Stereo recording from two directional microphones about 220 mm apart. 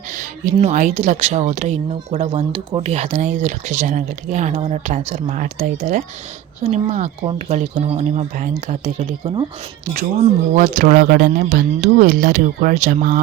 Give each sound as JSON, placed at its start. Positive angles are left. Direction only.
{"t": 0.2, "sound": "speech", "side_deg": -35}
{"t": 10.5, "sound": "speech", "side_deg": -35}